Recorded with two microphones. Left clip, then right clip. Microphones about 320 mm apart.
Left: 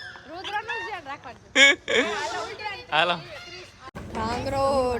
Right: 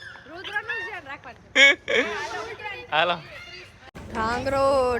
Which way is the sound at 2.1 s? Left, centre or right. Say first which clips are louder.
Left 2 dB; left.